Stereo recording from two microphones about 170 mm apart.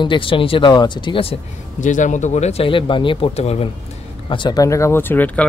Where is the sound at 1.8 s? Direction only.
45° left (ahead or behind).